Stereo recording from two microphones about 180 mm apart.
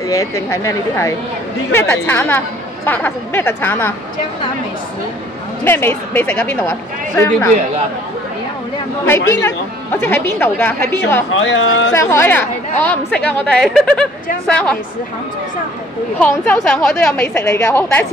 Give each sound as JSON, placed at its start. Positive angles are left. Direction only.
{"t": 0.1, "sound": "a woman's voice", "side_deg": 15}
{"t": 5.6, "sound": "a woman's voice", "side_deg": 10}
{"t": 9.0, "sound": "a woman's voice", "side_deg": 15}
{"t": 11.3, "sound": "speech", "side_deg": 90}
{"t": 11.9, "sound": "a woman's voice", "side_deg": 15}
{"t": 16.2, "sound": "a woman's voice", "side_deg": 10}